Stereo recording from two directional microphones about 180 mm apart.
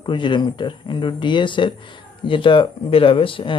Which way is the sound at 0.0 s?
25° left (ahead or behind).